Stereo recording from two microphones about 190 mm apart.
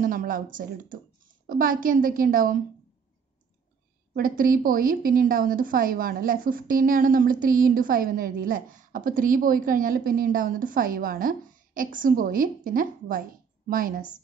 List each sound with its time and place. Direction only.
0.0 s speech: 45° right (ahead or behind)
1.5 s speech: 45° right (ahead or behind)
4.1 s speech: 50° right (ahead or behind)